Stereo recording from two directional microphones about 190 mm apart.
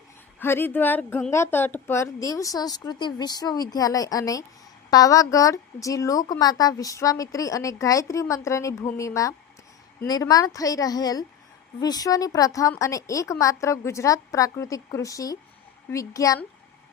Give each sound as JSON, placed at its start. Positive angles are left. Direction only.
{"t": 0.3, "sound": "a woman's voice", "side_deg": 10}